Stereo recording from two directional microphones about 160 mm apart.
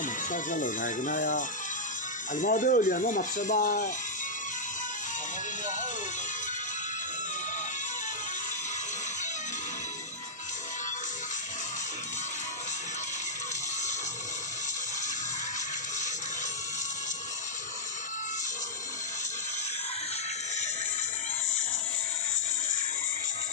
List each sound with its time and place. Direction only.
0.0 s speech: 55° left (ahead or behind)